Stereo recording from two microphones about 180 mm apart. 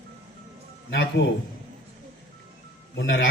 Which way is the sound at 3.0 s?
90° left.